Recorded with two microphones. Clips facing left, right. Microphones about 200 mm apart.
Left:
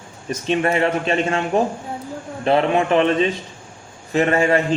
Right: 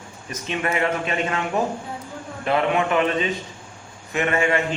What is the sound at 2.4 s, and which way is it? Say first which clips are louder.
A man's voice: left 4 dB; 30° left (ahead or behind).